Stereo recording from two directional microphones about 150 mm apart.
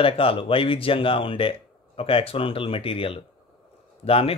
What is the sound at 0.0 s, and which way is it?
Speech, 35° left (ahead or behind).